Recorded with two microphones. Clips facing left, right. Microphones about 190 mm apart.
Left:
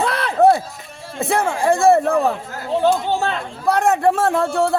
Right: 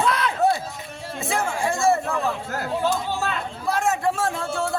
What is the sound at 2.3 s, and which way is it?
Speech, 30° left (ahead or behind).